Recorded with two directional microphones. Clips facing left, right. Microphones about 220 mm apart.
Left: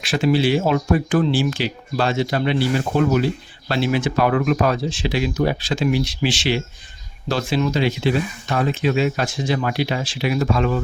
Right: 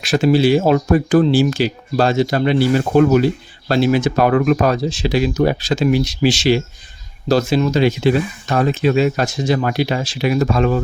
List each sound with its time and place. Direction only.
0.0 s speech: 40° right (ahead or behind)